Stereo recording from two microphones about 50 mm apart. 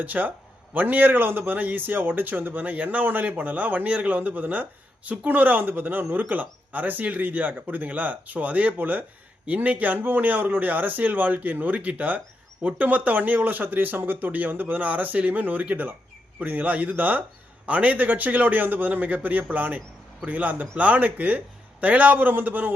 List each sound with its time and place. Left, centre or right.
0.0 s a man's voice: right